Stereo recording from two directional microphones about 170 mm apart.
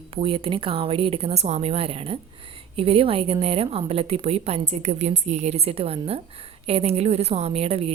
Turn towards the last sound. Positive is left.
turn(degrees=-35)  # may be behind; listen again after turning